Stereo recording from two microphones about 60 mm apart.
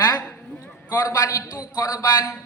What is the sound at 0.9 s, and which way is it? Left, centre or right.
Speech, left.